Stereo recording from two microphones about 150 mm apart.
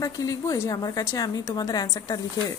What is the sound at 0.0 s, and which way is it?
A woman's voice, 25° left (ahead or behind).